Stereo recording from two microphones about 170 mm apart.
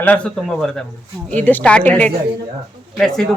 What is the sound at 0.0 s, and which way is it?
A woman's voice, 10° left (ahead or behind).